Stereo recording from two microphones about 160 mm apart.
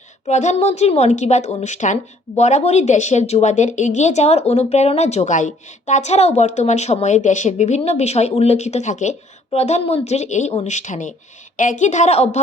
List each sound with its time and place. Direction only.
0.3 s a woman's voice: 45° left (ahead or behind)